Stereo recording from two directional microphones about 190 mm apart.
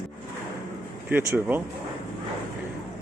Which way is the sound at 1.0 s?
10° right (ahead or behind).